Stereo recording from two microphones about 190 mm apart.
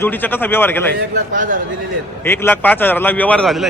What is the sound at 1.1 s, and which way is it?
Speech, 45° right (ahead or behind).